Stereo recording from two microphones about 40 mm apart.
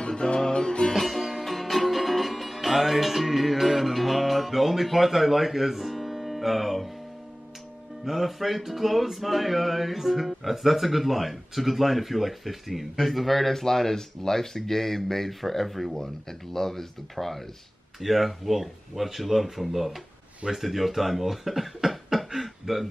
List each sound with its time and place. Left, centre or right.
0.0 s music: left
0.9 s music: centre
8.0 s music: centre
13.0 s speech: centre
18.0 s music: centre
20.4 s speech: centre